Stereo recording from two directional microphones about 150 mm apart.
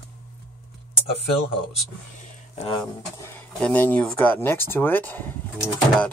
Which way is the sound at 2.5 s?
40° left (ahead or behind).